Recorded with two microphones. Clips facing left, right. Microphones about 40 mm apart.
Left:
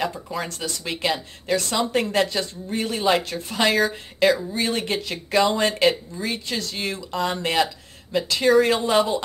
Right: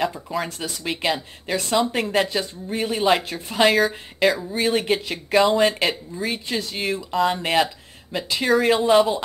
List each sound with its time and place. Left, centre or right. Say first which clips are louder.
0.0 s speech: right 2 dB; centre
6.4 s speech: right 2 dB; centre